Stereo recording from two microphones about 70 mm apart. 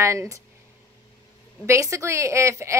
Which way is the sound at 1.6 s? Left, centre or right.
Right.